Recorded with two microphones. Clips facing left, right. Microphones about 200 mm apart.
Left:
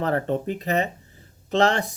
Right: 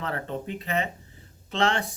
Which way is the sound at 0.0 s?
40° left (ahead or behind).